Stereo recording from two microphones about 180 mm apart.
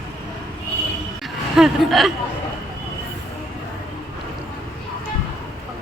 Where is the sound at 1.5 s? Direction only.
Centre (ahead or behind).